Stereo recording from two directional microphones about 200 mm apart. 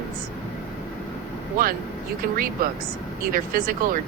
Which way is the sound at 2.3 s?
45° right (ahead or behind).